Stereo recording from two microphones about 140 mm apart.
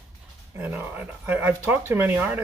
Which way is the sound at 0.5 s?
15° right (ahead or behind).